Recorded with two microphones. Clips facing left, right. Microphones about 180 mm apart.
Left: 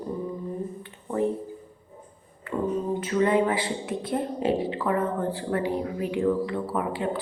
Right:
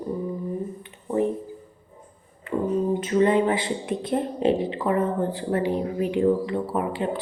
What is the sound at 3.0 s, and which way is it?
Speech, 25° right (ahead or behind).